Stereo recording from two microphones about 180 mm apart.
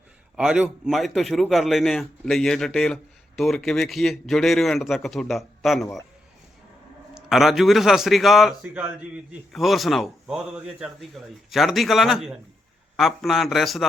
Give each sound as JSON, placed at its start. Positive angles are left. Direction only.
{"t": 0.3, "sound": "a man's voice", "side_deg": -5}
{"t": 7.1, "sound": "a man's voice", "side_deg": 0}